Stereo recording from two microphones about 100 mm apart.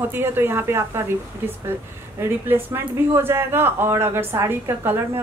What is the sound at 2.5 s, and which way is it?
Speech, 20° right (ahead or behind).